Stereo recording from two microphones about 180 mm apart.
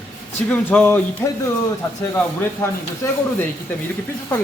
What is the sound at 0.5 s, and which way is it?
Speech, 10° left (ahead or behind).